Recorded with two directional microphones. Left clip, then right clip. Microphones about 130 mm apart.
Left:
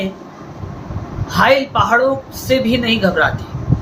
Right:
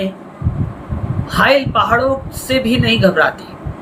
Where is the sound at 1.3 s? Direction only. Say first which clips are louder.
Even; 20° right (ahead or behind).